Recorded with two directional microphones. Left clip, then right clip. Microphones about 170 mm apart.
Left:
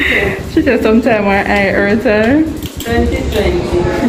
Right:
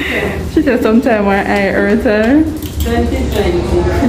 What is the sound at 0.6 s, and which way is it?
Speech, 15° right (ahead or behind).